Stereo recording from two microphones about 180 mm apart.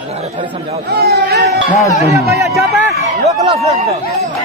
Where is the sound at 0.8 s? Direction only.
60° right (ahead or behind).